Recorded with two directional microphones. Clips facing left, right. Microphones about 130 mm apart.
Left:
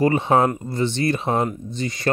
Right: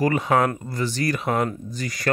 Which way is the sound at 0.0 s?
30° left (ahead or behind).